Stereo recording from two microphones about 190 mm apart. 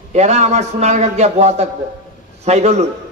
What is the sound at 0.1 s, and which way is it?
A man's voice, 35° right (ahead or behind).